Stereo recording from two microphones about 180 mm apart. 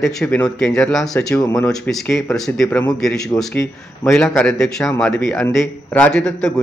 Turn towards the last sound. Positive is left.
turn(degrees=5)  # may be behind; listen again after turning